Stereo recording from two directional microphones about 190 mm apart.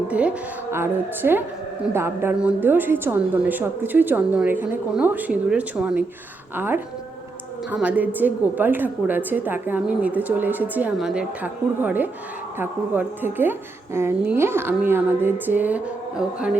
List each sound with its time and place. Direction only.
0.1 s a woman's voice: 5° right (ahead or behind)